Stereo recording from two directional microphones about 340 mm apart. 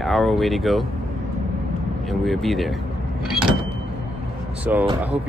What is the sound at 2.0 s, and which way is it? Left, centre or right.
Speech, centre.